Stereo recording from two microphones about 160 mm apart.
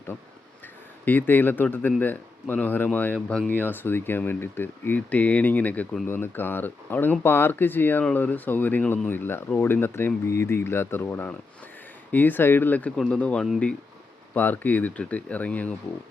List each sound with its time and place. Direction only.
1.0 s speech: 10° left (ahead or behind)